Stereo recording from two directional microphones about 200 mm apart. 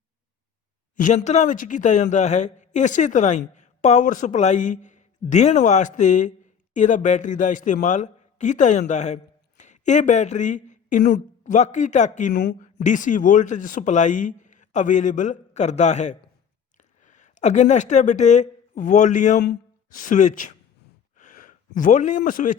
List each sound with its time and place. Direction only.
0.9 s speech: 40° left (ahead or behind)
12.3 s speech: 55° left (ahead or behind)
12.5 s speech: 40° left (ahead or behind)
19.4 s a sound: 55° left (ahead or behind)
20.0 s speech: 40° left (ahead or behind)
21.2 s a sound: 40° left (ahead or behind)